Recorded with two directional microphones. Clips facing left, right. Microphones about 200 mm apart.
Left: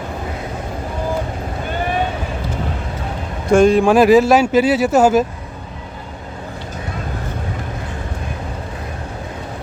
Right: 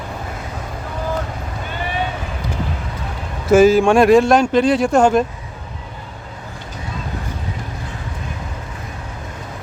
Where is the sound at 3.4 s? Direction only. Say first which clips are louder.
Right 1 dB; 5° right (ahead or behind).